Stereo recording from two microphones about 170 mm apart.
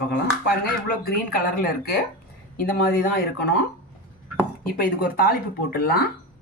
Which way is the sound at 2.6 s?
60° left (ahead or behind).